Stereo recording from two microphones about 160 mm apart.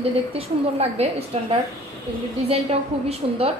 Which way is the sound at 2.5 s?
40° right (ahead or behind).